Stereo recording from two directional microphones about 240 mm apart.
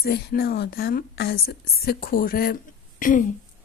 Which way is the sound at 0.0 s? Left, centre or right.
Left.